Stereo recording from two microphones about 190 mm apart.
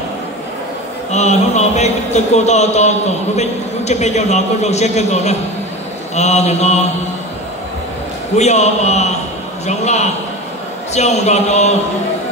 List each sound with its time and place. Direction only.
1.1 s a man's voice: 35° left (ahead or behind)
8.4 s a man's voice: 35° left (ahead or behind)